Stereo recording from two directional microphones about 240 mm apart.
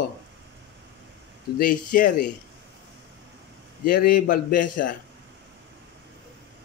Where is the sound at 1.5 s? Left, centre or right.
Left.